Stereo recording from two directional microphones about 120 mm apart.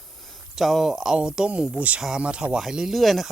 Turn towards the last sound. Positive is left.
turn(degrees=0)  # may be behind; listen again after turning